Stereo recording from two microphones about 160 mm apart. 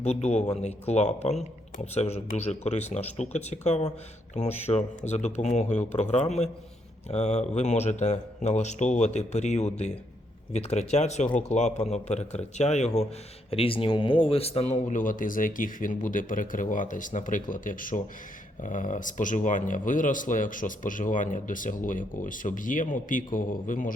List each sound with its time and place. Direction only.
0.0 s speech: 45° left (ahead or behind)